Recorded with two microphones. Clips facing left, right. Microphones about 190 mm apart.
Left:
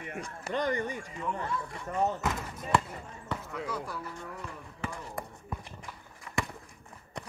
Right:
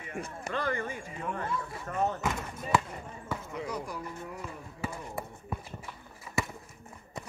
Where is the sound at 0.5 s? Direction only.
15° left (ahead or behind).